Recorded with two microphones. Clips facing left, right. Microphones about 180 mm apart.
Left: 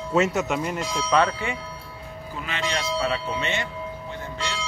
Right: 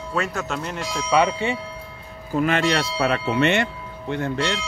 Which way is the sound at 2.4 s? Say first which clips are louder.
Right 9 dB; 55° right (ahead or behind).